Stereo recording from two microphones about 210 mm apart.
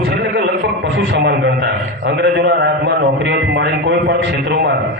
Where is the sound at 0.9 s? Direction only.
55° right (ahead or behind).